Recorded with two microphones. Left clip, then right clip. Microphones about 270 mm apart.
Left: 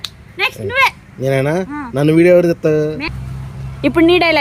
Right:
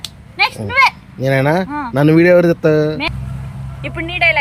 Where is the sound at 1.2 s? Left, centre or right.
Centre.